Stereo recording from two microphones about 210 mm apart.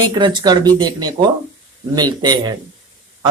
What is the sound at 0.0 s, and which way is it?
Speech, 20° right (ahead or behind).